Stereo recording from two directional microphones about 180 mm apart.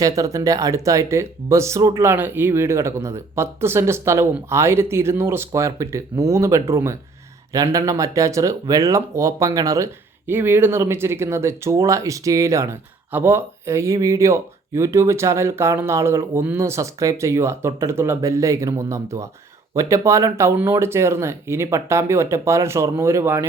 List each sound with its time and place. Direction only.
0.0 s speech: 20° right (ahead or behind)